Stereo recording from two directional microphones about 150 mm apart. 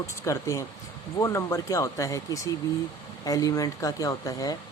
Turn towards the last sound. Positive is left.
turn(degrees=25)  # may be behind; listen again after turning